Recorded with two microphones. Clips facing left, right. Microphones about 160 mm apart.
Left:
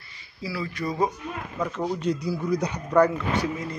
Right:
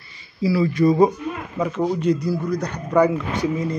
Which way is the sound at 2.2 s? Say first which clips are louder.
Right 3 dB; 5° left (ahead or behind).